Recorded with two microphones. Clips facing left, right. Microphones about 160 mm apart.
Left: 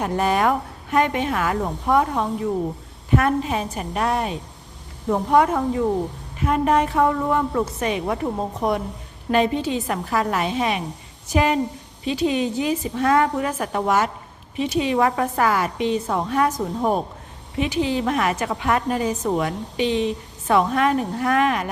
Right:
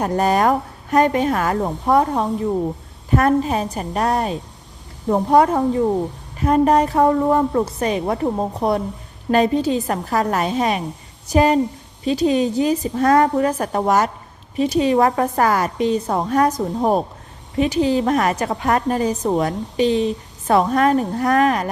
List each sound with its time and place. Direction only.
0.0 s a woman's voice: 40° right (ahead or behind)